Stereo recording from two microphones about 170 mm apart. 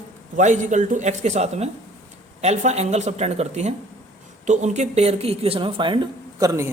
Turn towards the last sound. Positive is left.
turn(degrees=-20)  # may be behind; listen again after turning